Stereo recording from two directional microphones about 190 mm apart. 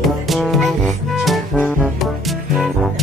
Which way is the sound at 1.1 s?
Centre (ahead or behind).